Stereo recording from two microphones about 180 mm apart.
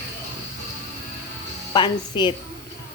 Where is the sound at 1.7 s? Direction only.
25° left (ahead or behind).